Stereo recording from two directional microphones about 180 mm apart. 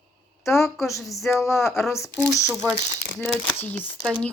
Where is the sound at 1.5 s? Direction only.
15° left (ahead or behind).